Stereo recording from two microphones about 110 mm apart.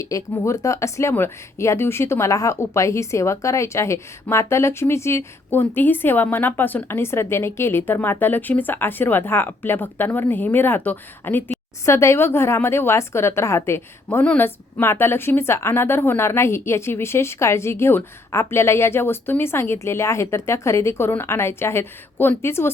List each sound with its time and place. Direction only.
0.0 s speech: 30° left (ahead or behind)